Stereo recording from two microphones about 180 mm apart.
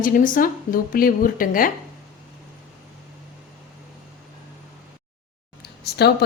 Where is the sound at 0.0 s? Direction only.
50° left (ahead or behind).